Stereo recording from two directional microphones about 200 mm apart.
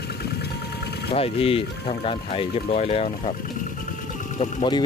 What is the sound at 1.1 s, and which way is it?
Speech, 30° left (ahead or behind).